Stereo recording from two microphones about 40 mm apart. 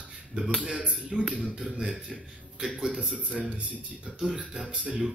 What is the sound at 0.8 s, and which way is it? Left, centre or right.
Speech, right.